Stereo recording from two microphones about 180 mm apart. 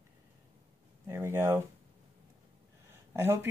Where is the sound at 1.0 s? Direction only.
15° right (ahead or behind).